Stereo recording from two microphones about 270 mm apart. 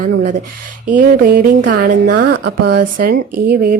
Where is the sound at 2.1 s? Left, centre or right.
Right.